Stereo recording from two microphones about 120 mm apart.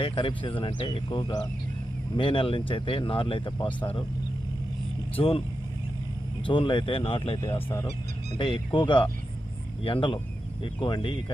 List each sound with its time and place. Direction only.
0.0 s speech: 45° left (ahead or behind)
5.2 s speech: 50° left (ahead or behind)
6.4 s speech: 40° left (ahead or behind)
7.4 s speech: 30° left (ahead or behind)
8.4 s speech: 45° left (ahead or behind)